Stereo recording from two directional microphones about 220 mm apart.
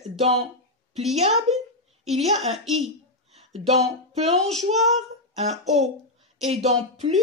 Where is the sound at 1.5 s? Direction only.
30° right (ahead or behind).